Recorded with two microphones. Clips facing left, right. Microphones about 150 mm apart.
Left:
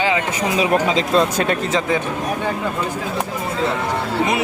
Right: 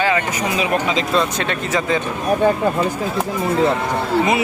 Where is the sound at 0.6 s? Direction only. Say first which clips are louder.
Left 3 dB; 35° left (ahead or behind).